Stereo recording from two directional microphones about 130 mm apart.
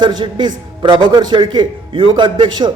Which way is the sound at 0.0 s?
35° right (ahead or behind).